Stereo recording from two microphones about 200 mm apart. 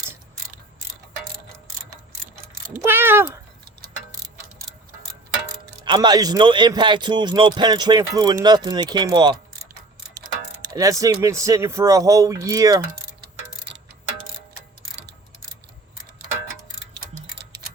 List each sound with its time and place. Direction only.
2.8 s speech: 10° right (ahead or behind)
5.8 s speech: 20° right (ahead or behind)
10.8 s speech: 15° right (ahead or behind)